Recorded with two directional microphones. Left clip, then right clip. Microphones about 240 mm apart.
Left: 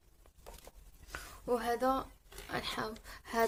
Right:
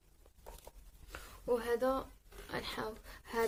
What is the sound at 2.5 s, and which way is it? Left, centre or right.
Speech, left.